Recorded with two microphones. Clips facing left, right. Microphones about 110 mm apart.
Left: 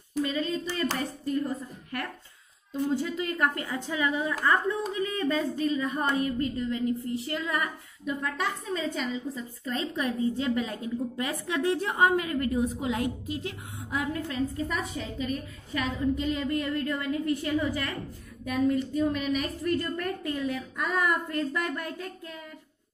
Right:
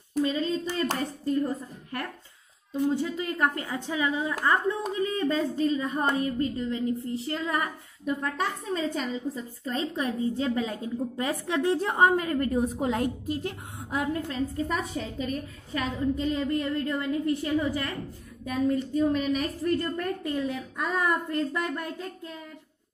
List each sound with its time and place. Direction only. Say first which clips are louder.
0.2 s speech: right 2 dB; 30° right (ahead or behind)
3.0 s a woman's voice: right 1 dB; 20° right (ahead or behind)